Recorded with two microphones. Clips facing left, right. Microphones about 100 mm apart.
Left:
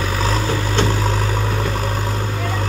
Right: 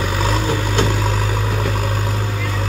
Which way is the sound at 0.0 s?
10° right (ahead or behind).